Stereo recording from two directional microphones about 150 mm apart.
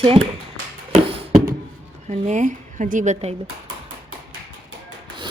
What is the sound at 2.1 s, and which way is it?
Speech, 55° right (ahead or behind).